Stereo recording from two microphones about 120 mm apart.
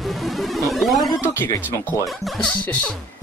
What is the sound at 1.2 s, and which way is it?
Speech, 20° left (ahead or behind).